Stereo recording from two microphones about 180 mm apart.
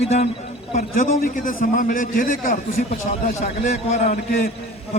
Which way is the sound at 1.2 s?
50° left (ahead or behind).